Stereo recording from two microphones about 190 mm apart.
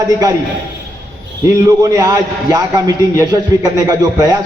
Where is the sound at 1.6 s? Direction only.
20° right (ahead or behind).